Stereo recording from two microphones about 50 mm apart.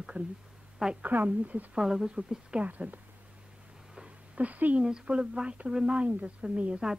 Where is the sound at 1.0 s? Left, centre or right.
Right.